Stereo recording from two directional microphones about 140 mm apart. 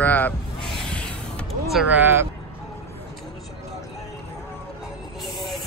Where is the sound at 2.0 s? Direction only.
15° right (ahead or behind).